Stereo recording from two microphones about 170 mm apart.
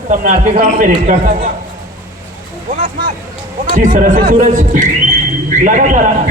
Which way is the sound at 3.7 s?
50° right (ahead or behind).